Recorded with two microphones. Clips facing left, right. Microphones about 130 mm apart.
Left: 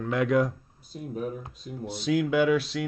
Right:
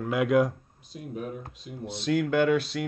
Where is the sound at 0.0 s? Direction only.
5° right (ahead or behind).